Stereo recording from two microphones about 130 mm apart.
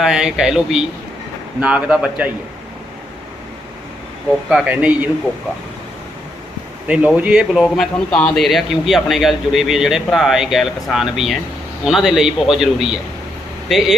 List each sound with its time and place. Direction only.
0.0 s speech: 5° right (ahead or behind)
4.4 s speech: 5° right (ahead or behind)
6.8 s speech: 10° right (ahead or behind)